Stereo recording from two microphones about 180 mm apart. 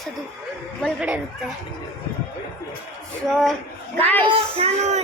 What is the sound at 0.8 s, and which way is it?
Speech, 5° left (ahead or behind).